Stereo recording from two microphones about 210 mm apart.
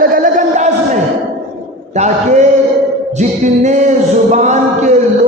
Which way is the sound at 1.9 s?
35° right (ahead or behind).